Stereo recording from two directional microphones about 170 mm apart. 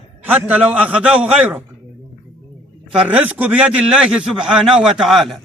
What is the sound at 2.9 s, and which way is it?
A man's voice, 5° right (ahead or behind).